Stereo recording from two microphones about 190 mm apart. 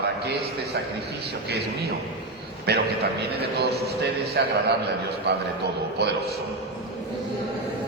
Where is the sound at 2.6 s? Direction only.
60° right (ahead or behind).